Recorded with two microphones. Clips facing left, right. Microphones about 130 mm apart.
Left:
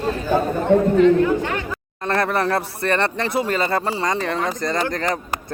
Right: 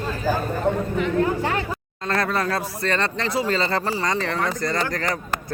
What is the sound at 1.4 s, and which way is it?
Speech, 35° right (ahead or behind).